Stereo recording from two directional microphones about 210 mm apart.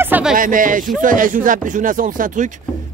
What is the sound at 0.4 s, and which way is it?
Speech, 40° right (ahead or behind).